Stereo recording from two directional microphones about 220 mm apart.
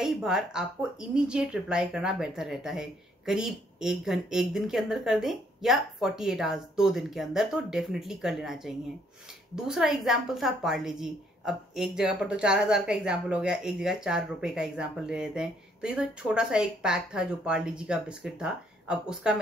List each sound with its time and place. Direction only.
0.0 s a woman's voice: centre (ahead or behind)